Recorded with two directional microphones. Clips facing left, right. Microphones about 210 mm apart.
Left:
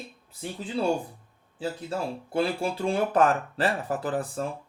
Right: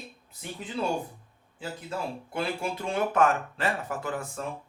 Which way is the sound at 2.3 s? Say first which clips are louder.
Left 5 dB; 35° left (ahead or behind).